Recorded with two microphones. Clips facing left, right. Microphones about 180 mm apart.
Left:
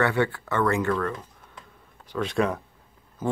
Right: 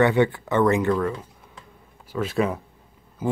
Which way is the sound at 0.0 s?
20° right (ahead or behind).